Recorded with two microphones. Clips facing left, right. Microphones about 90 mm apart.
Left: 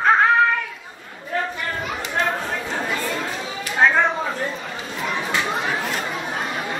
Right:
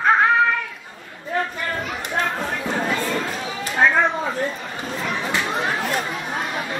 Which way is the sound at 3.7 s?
Centre (ahead or behind).